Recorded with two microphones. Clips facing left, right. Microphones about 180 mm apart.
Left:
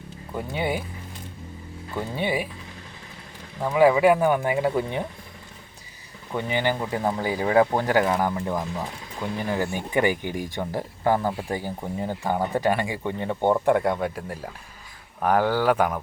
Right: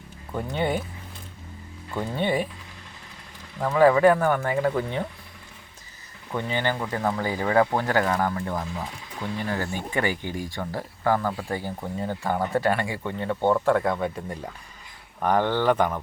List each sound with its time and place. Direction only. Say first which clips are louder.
0.3 s speech: right 1 dB; 5° left (ahead or behind)
2.0 s speech: right 1 dB; 10° left (ahead or behind)
3.6 s speech: even; 10° left (ahead or behind)
6.3 s speech: left 2 dB; 15° left (ahead or behind)